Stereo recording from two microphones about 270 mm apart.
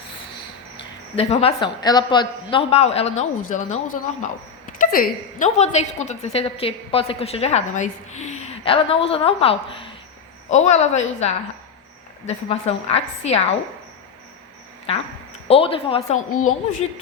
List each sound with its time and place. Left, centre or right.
1.1 s a woman's voice: left
12.2 s a woman's voice: left
15.4 s a woman's voice: left
16.3 s a woman's voice: left